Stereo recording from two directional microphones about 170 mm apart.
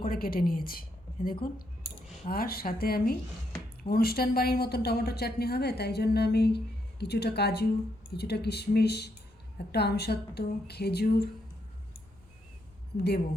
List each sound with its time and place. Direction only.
0.0 s a woman's voice: 60° left (ahead or behind)